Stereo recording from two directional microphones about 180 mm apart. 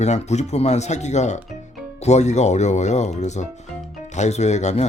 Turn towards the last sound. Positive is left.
turn(degrees=40)  # may be behind; listen again after turning